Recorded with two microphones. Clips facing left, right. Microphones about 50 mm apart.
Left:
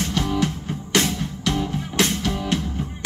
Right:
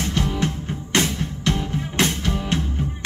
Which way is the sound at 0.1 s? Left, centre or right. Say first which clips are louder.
Left 1 dB; right.